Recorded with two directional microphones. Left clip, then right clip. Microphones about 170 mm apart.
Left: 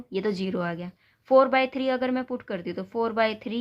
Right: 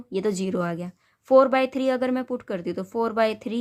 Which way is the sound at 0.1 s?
35° right (ahead or behind).